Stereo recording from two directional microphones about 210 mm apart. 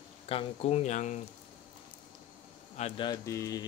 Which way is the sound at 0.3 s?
30° left (ahead or behind).